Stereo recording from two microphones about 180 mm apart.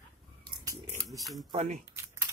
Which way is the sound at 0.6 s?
20° right (ahead or behind).